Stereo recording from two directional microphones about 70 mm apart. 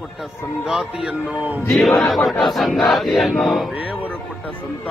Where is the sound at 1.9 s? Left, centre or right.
Centre.